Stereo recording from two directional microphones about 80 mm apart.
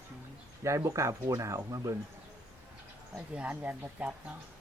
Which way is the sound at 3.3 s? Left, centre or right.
Centre.